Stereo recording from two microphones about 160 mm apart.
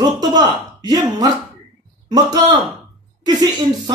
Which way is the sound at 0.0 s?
25° right (ahead or behind).